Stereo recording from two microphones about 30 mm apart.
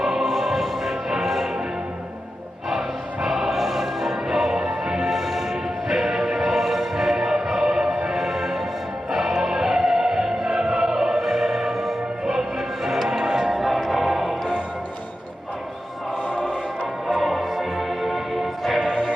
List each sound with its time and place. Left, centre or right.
0.0 s music: centre
3.2 s music: centre
13.5 s music: centre
16.2 s choir: right
17.2 s music: centre
18.9 s music: right